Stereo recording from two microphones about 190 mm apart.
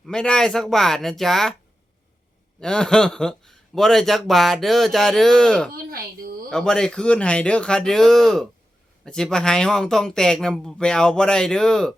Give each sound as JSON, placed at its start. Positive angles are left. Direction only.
{"t": 0.0, "sound": "speech", "side_deg": 5}
{"t": 2.6, "sound": "speech", "side_deg": 5}
{"t": 5.7, "sound": "a woman's voice", "side_deg": -50}
{"t": 6.5, "sound": "speech", "side_deg": 5}